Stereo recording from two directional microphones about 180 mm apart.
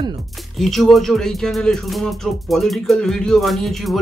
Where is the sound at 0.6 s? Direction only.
Centre (ahead or behind).